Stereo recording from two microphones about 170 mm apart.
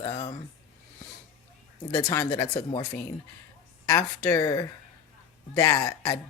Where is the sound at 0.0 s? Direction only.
20° left (ahead or behind).